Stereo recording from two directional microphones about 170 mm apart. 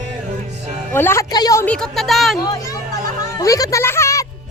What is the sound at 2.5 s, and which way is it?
Speech, 20° left (ahead or behind).